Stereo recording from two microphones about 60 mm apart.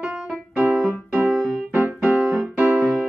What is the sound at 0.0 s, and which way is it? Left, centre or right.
Music, right.